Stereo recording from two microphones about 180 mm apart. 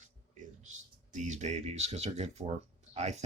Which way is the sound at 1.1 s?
40° right (ahead or behind).